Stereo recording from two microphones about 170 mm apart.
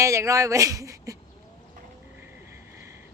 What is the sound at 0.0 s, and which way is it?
A woman's voice, 20° right (ahead or behind).